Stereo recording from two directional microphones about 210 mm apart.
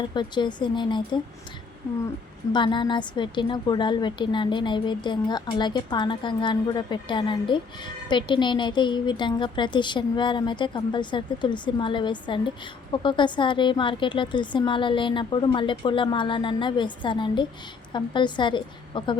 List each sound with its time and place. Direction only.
0.1 s a woman's voice: 20° left (ahead or behind)
2.5 s a woman's voice: 20° left (ahead or behind)